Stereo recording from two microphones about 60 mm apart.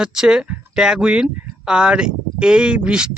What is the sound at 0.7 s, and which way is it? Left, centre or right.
Speech, centre.